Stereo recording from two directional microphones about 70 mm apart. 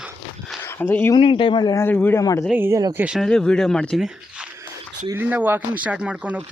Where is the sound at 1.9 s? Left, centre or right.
Left.